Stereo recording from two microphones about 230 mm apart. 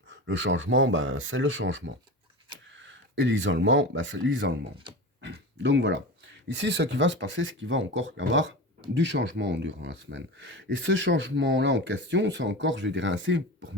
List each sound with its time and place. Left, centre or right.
0.1 s speech: right